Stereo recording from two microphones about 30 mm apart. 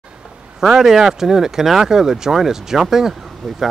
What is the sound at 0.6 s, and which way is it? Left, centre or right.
Speech, centre.